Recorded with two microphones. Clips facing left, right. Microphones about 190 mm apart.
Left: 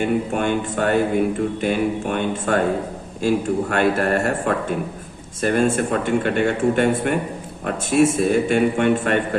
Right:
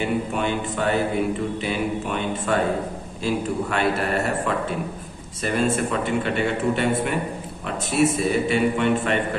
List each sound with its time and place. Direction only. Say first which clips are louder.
0.0 s speech: left 3 dB; 50° left (ahead or behind)